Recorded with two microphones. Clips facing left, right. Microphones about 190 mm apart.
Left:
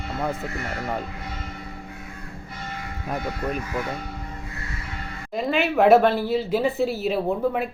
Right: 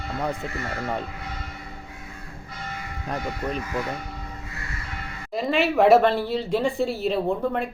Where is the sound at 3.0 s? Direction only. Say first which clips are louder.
Left 1 dB; 5° left (ahead or behind).